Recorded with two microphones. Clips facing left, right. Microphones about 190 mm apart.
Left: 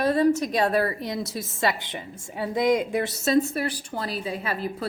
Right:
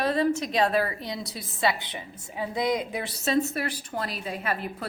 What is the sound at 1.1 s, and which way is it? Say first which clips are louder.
A woman's voice: left 5 dB; 50° left (ahead or behind).